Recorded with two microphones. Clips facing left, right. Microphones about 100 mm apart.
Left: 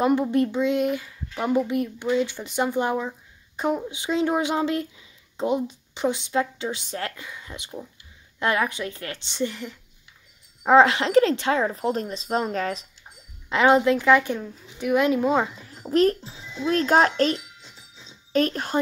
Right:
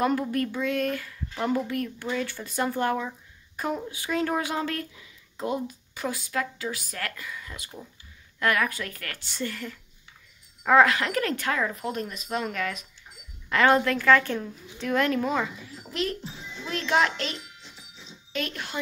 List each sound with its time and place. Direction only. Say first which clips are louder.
0.0 s speech: left 5 dB; 20° left (ahead or behind)
13.5 s a woman's voice: left 3 dB; 20° left (ahead or behind)
15.9 s a child's voice: left 11 dB; 45° left (ahead or behind)